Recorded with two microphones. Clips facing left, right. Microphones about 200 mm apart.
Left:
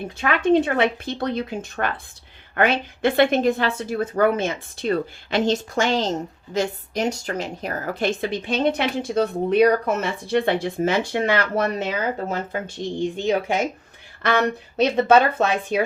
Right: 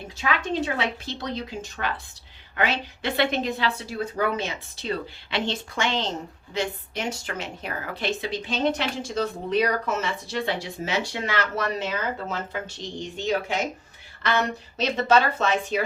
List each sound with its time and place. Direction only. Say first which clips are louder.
0.2 s a woman's voice: left 8 dB; 55° left (ahead or behind)